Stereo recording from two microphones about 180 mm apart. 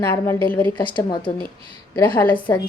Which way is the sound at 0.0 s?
10° left (ahead or behind).